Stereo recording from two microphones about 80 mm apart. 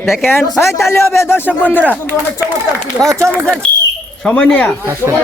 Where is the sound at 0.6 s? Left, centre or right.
Left.